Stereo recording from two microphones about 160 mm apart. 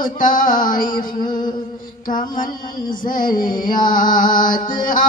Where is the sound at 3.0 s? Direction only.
60° left (ahead or behind).